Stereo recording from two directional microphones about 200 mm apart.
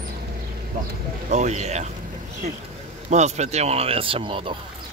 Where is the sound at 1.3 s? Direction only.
35° right (ahead or behind).